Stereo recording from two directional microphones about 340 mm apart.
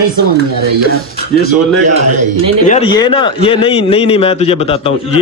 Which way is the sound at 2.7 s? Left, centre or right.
Centre.